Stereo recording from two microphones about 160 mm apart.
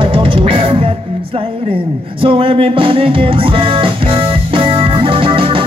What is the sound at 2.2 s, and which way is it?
Music, 35° right (ahead or behind).